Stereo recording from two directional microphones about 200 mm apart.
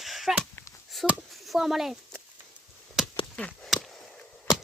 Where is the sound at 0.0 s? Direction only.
Centre (ahead or behind).